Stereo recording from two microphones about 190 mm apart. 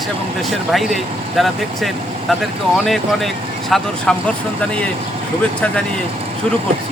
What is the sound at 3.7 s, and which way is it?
Speech, centre (ahead or behind).